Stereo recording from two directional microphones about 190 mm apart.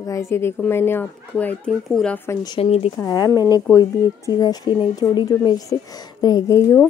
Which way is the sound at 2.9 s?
20° left (ahead or behind).